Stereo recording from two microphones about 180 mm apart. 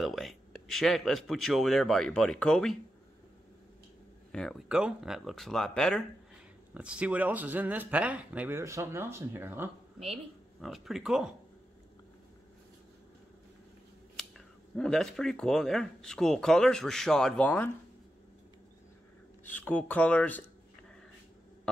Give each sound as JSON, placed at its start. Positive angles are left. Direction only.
{"t": 0.0, "sound": "speech", "side_deg": 0}
{"t": 4.3, "sound": "speech", "side_deg": 5}
{"t": 9.9, "sound": "speech", "side_deg": -35}
{"t": 10.6, "sound": "speech", "side_deg": 0}
{"t": 14.1, "sound": "speech", "side_deg": 0}
{"t": 19.4, "sound": "speech", "side_deg": 10}